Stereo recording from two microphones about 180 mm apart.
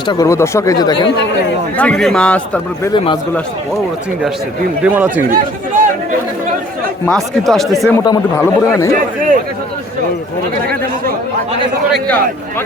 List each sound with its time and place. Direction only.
0.1 s speech: 20° left (ahead or behind)
1.8 s a man's voice: 5° left (ahead or behind)
2.9 s speech: 25° left (ahead or behind)
4.8 s speech: 10° right (ahead or behind)
5.3 s speech: 45° right (ahead or behind)
7.0 s a man's voice: centre (ahead or behind)
11.9 s a man's voice: centre (ahead or behind)